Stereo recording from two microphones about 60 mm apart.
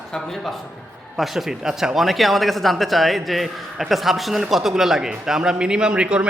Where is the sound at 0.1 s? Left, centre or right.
Centre.